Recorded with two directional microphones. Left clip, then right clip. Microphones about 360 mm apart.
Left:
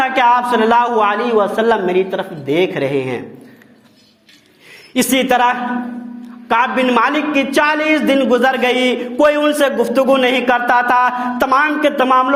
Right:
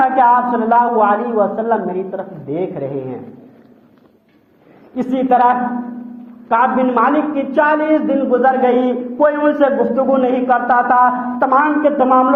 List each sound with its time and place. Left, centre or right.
0.0 s a man's voice: left
4.9 s a man's voice: left